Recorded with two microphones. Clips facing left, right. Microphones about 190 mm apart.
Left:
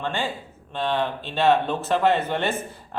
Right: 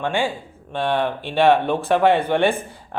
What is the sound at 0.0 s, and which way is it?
A man's voice, 15° right (ahead or behind).